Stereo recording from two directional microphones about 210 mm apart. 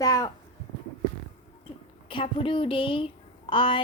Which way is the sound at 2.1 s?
25° left (ahead or behind).